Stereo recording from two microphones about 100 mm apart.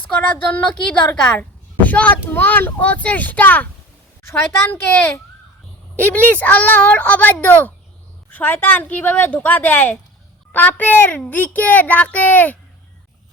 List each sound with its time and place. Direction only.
0.1 s a child's voice: 15° left (ahead or behind)